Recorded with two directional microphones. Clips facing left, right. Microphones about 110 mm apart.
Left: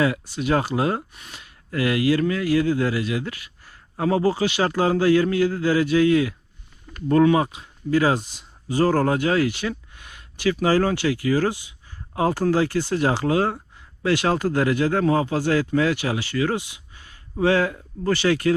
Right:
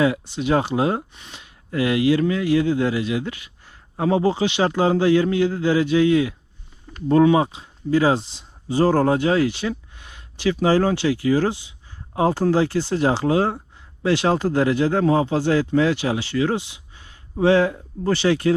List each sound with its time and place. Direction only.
0.0 s speech: 15° right (ahead or behind)
7.1 s speech: 15° right (ahead or behind)